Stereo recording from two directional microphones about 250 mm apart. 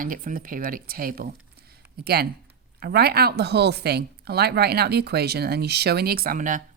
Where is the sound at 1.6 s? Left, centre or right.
Right.